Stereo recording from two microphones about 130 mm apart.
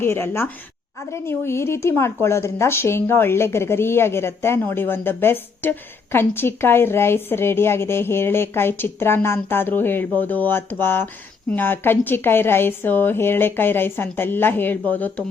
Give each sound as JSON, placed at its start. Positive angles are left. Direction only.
{"t": 0.0, "sound": "a woman's voice", "side_deg": 20}